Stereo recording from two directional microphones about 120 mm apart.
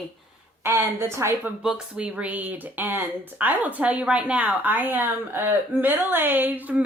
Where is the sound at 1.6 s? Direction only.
10° right (ahead or behind).